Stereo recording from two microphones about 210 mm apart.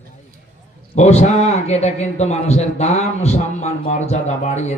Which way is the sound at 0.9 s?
30° left (ahead or behind).